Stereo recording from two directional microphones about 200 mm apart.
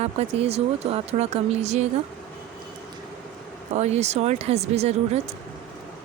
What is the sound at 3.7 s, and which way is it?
Speech, 35° right (ahead or behind).